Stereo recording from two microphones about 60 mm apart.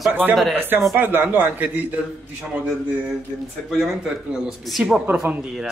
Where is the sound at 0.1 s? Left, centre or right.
Right.